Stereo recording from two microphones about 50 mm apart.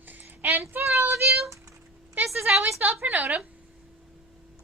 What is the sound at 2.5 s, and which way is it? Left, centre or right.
Speech, right.